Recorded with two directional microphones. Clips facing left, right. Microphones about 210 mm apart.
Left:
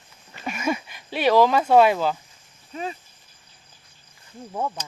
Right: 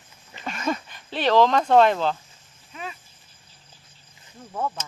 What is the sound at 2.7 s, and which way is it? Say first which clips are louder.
Speech: left 6 dB; 35° left (ahead or behind).